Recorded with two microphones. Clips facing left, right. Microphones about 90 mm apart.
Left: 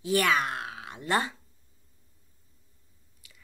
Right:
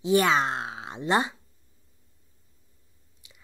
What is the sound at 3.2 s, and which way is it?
Biting, 20° right (ahead or behind).